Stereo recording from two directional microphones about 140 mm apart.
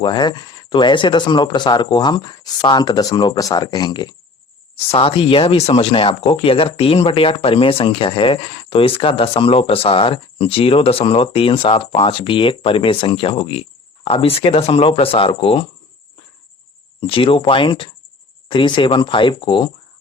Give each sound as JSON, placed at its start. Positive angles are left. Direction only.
{"t": 0.0, "sound": "speech", "side_deg": 30}
{"t": 4.7, "sound": "speech", "side_deg": 45}
{"t": 17.0, "sound": "speech", "side_deg": 40}